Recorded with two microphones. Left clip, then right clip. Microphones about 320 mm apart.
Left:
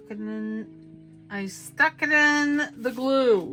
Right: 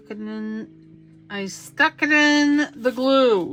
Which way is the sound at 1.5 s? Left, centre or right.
Right.